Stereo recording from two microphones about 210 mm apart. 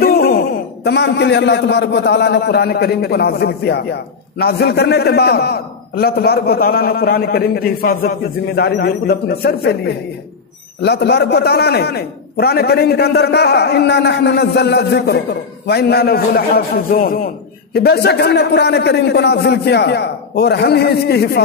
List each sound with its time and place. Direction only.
0.0 s a man's voice: 50° left (ahead or behind)